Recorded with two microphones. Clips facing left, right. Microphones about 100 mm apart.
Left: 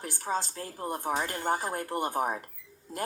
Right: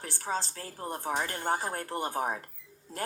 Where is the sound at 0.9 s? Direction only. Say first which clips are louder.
Left 1 dB; 10° left (ahead or behind).